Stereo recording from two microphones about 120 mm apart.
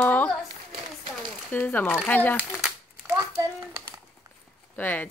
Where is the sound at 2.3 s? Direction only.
15° right (ahead or behind).